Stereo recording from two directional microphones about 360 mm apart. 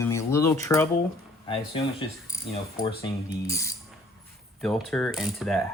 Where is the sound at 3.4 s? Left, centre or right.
Centre.